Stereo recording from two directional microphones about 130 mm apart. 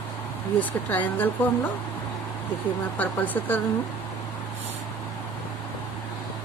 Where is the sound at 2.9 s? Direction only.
15° left (ahead or behind).